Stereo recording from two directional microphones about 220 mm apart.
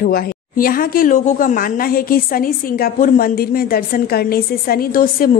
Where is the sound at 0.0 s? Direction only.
40° left (ahead or behind).